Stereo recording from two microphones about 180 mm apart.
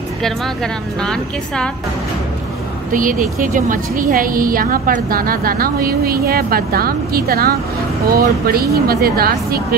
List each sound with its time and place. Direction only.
1.0 s speech: 5° left (ahead or behind)
2.9 s a woman's voice: 50° right (ahead or behind)